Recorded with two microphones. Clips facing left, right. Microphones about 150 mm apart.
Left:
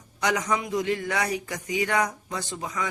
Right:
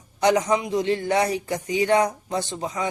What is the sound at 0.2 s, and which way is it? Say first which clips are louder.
A man's voice: right 6 dB; 30° right (ahead or behind).